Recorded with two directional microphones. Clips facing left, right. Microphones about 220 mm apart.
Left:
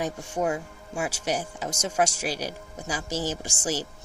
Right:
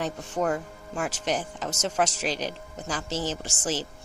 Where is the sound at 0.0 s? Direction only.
10° left (ahead or behind).